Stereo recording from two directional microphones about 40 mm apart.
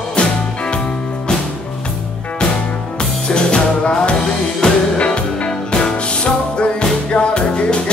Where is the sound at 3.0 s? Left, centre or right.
Left.